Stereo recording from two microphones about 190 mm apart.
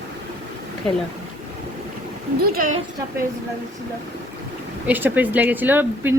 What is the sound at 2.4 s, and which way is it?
Speech, 50° right (ahead or behind).